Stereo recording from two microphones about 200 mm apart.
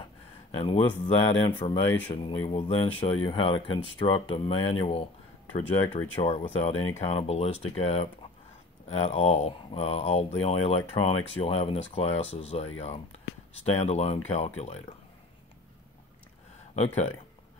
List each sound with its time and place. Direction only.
0.5 s speech: 25° left (ahead or behind)
6.1 s speech: 30° left (ahead or behind)
16.7 s speech: 35° left (ahead or behind)